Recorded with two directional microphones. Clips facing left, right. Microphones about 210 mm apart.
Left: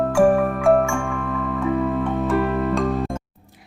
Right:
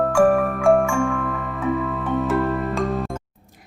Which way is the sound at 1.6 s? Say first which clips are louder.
Left 2 dB; centre (ahead or behind).